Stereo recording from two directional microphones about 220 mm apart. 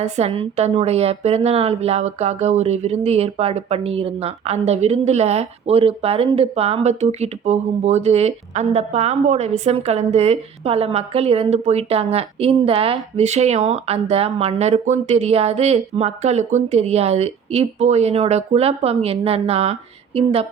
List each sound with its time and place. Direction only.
0.0 s a woman's voice: 30° right (ahead or behind)